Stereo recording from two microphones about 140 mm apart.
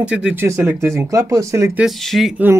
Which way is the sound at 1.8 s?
Centre (ahead or behind).